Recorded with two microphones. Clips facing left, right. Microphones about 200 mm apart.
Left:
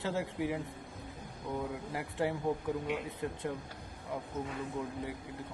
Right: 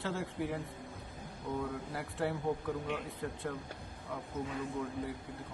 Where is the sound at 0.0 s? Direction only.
15° left (ahead or behind).